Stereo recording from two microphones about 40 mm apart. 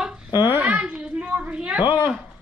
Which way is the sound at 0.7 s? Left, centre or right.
Right.